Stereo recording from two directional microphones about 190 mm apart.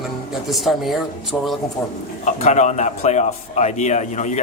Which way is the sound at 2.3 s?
40° left (ahead or behind).